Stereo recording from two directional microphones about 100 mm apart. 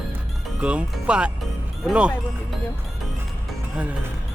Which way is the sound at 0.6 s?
10° right (ahead or behind).